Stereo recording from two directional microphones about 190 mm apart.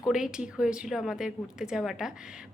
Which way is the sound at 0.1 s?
5° right (ahead or behind).